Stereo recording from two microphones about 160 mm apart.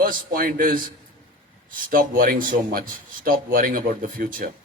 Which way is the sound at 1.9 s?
60° right (ahead or behind).